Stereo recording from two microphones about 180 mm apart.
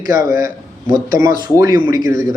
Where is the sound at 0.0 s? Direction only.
20° right (ahead or behind).